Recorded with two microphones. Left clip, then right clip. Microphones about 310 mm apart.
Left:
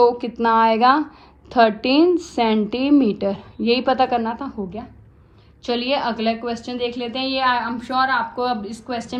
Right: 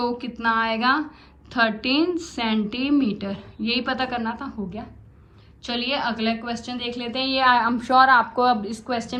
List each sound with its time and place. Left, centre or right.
0.0 s a woman's voice: centre